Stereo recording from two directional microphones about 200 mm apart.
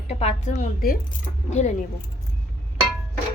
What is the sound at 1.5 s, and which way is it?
Speech, 35° left (ahead or behind).